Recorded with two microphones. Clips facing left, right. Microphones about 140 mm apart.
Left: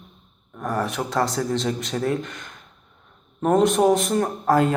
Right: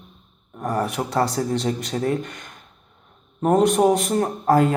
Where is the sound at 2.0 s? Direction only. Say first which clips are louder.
Right 1 dB; 35° right (ahead or behind).